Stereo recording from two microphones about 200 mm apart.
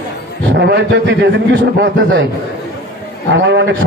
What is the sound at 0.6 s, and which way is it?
A man's voice, 60° right (ahead or behind).